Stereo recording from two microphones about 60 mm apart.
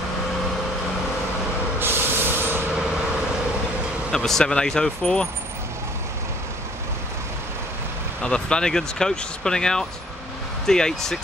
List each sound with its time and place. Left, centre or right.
1.8 s vehicle: right
4.1 s speech: centre
8.2 s speech: centre